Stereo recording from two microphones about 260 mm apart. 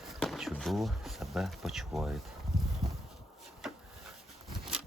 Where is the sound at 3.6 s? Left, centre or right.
Centre.